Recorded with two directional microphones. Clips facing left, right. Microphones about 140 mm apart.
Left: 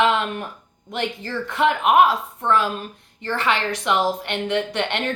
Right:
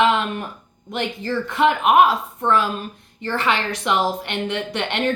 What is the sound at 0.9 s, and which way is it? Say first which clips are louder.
Speech: right 2 dB; 15° right (ahead or behind).